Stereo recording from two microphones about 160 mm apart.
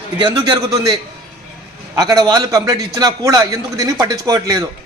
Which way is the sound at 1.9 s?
20° right (ahead or behind).